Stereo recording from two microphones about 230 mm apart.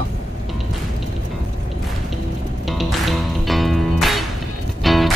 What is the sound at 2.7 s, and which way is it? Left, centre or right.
Music, centre.